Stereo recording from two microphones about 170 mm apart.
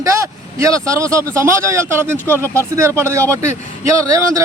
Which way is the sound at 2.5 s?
15° right (ahead or behind).